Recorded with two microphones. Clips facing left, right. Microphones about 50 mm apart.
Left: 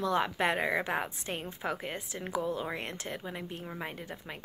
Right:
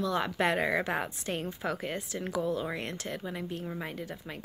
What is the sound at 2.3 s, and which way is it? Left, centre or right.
Speech, left.